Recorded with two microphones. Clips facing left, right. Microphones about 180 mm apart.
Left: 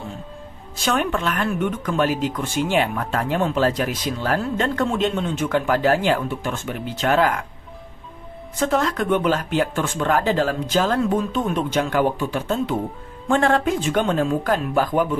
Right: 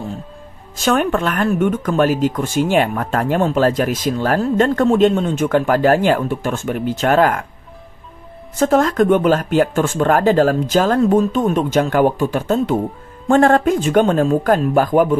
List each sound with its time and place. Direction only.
0.8 s speech: 50° right (ahead or behind)
8.5 s speech: 45° right (ahead or behind)